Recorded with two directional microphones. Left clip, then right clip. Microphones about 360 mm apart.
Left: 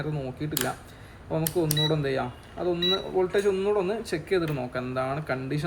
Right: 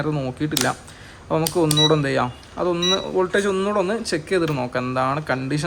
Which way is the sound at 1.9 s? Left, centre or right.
Centre.